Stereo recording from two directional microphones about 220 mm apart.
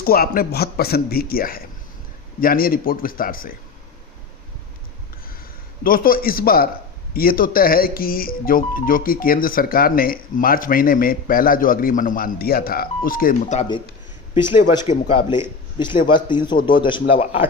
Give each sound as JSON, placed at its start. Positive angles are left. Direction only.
{"t": 0.0, "sound": "a man's voice", "side_deg": 40}
{"t": 5.8, "sound": "speech", "side_deg": 40}
{"t": 14.8, "sound": "speech", "side_deg": 25}